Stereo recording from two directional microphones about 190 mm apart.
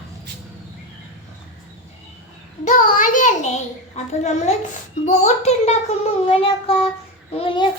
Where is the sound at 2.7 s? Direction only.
45° left (ahead or behind).